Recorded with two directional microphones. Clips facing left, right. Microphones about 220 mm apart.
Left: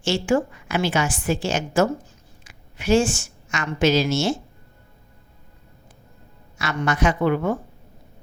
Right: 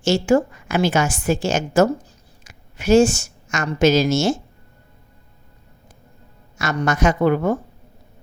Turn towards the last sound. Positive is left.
turn(degrees=-40)  # may be behind; listen again after turning